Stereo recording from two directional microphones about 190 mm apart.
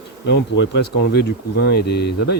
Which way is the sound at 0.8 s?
60° left (ahead or behind).